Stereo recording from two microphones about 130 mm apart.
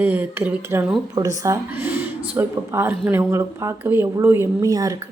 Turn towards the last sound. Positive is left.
turn(degrees=-25)  # may be behind; listen again after turning